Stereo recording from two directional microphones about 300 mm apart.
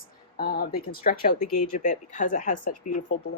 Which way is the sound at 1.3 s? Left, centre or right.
Left.